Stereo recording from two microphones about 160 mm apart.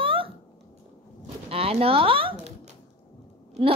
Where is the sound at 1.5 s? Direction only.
40° right (ahead or behind).